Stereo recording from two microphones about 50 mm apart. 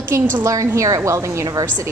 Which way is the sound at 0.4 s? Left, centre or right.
Right.